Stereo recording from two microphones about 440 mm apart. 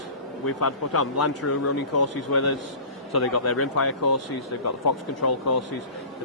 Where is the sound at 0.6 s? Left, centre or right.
Left.